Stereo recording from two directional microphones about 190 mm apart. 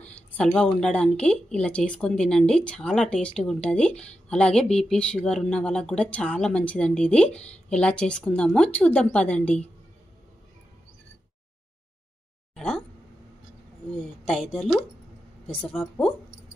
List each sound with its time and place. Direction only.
0.3 s a woman's voice: 5° left (ahead or behind)
12.5 s a sound: 5° left (ahead or behind)
14.2 s speech: 5° left (ahead or behind)